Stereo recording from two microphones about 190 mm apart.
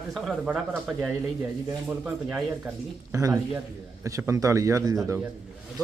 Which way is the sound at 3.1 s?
15° right (ahead or behind).